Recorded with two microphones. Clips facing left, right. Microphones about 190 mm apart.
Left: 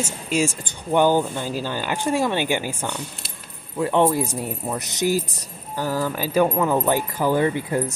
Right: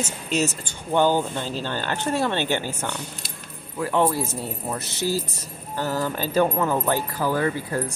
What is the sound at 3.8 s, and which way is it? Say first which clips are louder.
Speech: left 3 dB; 20° left (ahead or behind).